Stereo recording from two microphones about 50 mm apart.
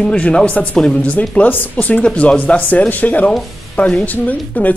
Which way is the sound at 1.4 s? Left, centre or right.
Left.